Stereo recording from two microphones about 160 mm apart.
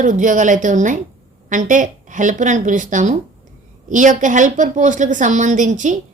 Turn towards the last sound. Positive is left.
turn(degrees=-50)  # may be behind; listen again after turning